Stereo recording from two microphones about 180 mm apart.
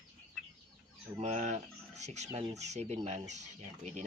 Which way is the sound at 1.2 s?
40° right (ahead or behind).